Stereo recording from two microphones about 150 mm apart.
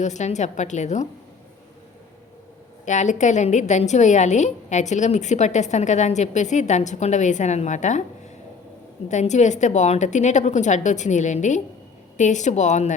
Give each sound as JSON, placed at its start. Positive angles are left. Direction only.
{"t": 0.0, "sound": "a woman's voice", "side_deg": 50}
{"t": 2.8, "sound": "a woman's voice", "side_deg": 55}
{"t": 9.0, "sound": "a woman's voice", "side_deg": 50}